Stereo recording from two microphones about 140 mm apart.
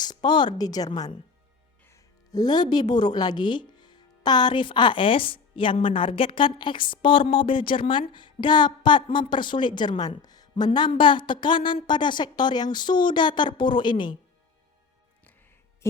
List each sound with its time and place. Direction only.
0.0 s speech: 30° left (ahead or behind)